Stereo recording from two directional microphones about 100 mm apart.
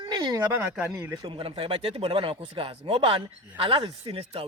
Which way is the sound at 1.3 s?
65° right (ahead or behind).